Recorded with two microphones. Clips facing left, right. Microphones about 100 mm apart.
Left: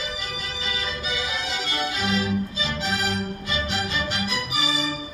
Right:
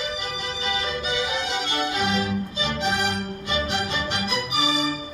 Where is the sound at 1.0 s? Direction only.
60° right (ahead or behind).